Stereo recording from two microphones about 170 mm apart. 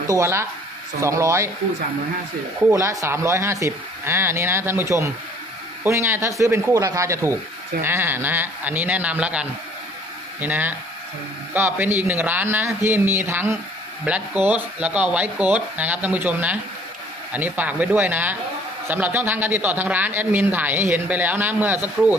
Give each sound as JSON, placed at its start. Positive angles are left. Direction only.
{"t": 0.2, "sound": "speech", "side_deg": -15}
{"t": 2.7, "sound": "speech", "side_deg": -15}